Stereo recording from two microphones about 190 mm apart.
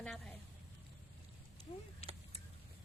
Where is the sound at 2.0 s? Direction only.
35° left (ahead or behind).